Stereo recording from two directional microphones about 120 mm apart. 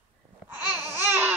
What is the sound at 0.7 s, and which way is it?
Babbling, 20° right (ahead or behind).